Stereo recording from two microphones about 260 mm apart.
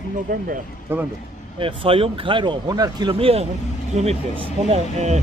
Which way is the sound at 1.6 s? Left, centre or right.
Centre.